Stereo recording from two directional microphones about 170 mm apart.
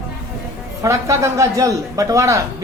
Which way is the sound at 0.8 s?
20° right (ahead or behind).